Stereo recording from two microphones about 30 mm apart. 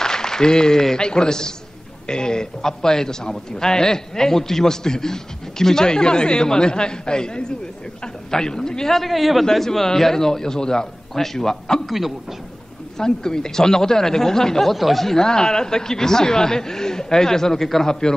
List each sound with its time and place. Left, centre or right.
0.0 s a sound: centre
0.9 s a man's voice: left
8.9 s a man's voice: centre
9.5 s speech: centre
11.9 s a man's voice: centre
12.9 s speech: centre
14.7 s a man's voice: centre
15.0 s a man's voice: left